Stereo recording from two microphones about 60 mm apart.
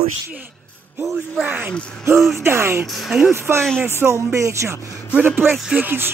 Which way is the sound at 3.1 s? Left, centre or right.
Centre.